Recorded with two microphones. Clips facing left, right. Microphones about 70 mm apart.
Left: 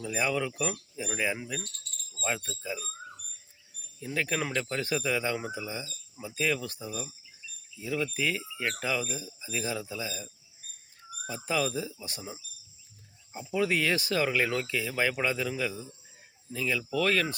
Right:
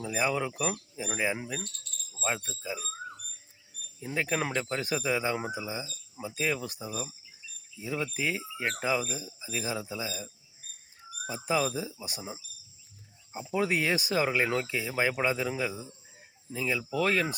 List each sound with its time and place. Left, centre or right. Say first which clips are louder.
0.0 s speech: even; centre
4.0 s speech: right 1 dB; centre
13.6 s speech: left 1 dB; centre